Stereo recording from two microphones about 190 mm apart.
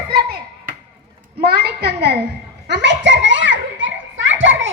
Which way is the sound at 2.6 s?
65° right (ahead or behind).